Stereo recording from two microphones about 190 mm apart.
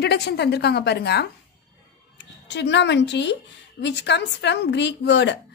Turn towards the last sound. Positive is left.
turn(degrees=65)  # may be behind; listen again after turning